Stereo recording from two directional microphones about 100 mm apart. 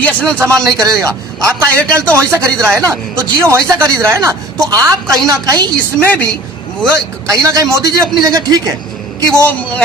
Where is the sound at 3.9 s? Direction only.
35° right (ahead or behind).